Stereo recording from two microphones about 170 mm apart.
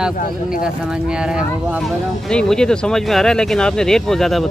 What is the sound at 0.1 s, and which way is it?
Speech, 55° left (ahead or behind).